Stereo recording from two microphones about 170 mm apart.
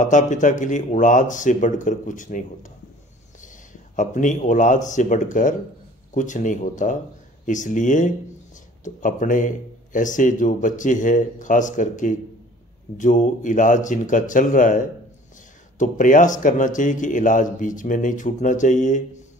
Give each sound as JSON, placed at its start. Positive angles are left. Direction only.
{"t": 0.0, "sound": "a man's voice", "side_deg": 45}